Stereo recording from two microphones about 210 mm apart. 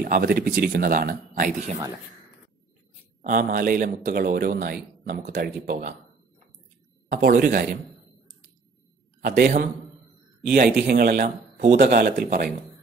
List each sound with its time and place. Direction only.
0.0 s a man's voice: 45° right (ahead or behind)
3.2 s a man's voice: 40° right (ahead or behind)
7.1 s a man's voice: 40° right (ahead or behind)
9.2 s a man's voice: 40° right (ahead or behind)